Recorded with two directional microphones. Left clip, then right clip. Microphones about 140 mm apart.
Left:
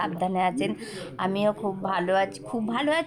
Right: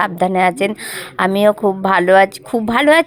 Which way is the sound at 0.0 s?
55° right (ahead or behind).